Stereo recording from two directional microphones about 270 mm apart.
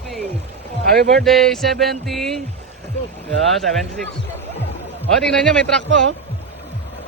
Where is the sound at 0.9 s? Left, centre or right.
Right.